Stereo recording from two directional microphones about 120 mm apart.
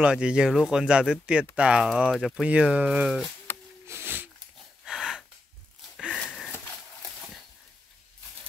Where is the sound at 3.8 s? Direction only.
20° right (ahead or behind).